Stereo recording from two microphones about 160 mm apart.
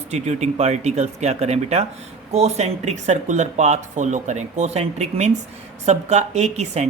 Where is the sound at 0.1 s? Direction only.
45° right (ahead or behind).